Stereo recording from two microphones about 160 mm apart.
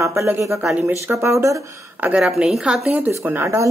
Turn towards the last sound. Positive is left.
turn(degrees=-15)  # may be behind; listen again after turning